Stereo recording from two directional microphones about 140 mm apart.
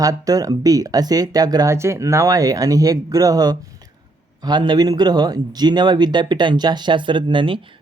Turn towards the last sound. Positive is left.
turn(degrees=-40)  # may be behind; listen again after turning